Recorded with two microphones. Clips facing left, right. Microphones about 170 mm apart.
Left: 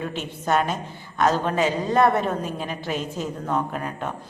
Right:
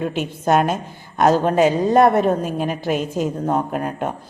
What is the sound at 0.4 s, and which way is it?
A man's voice, 50° right (ahead or behind).